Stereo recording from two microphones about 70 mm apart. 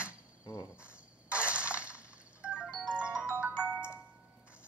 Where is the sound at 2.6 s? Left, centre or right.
Centre.